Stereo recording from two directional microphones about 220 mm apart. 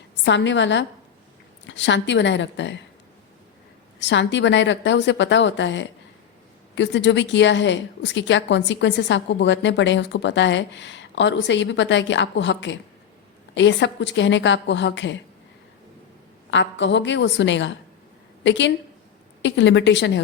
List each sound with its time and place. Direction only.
0.3 s a woman's voice: 55° left (ahead or behind)
4.0 s a woman's voice: 55° left (ahead or behind)
16.5 s a woman's voice: 55° left (ahead or behind)